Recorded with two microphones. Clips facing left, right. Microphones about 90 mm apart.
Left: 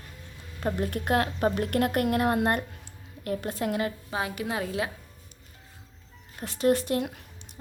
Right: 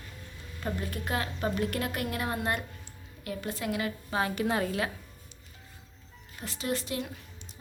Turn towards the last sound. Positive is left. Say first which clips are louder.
# left 6 dB
turn(degrees=55)  # may be behind; listen again after turning